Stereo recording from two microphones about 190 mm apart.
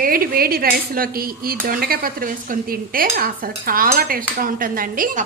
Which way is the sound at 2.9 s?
50° right (ahead or behind).